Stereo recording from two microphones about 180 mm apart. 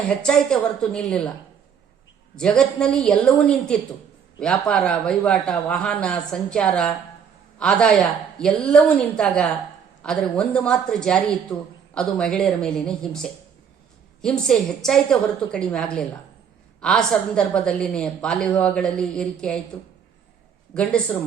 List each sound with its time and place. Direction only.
0.2 s a woman's voice: 5° left (ahead or behind)
2.3 s a woman's voice: 5° left (ahead or behind)
20.7 s speech: 5° left (ahead or behind)